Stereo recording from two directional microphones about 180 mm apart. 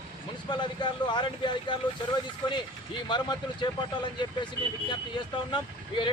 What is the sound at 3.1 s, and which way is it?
Speech, 25° left (ahead or behind).